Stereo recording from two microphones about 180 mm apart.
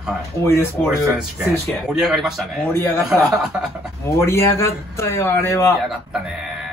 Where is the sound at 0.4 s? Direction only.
15° left (ahead or behind).